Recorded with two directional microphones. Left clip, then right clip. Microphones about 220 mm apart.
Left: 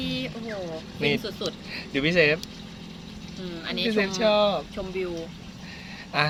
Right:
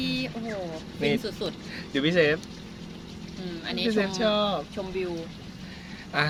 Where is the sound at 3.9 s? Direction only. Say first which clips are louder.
Left 3 dB; 20° left (ahead or behind).